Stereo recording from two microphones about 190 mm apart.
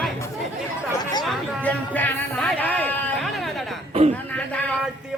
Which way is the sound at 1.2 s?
10° left (ahead or behind).